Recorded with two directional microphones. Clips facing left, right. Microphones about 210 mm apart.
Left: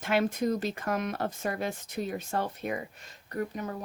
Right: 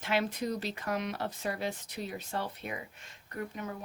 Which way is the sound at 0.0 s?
50° left (ahead or behind).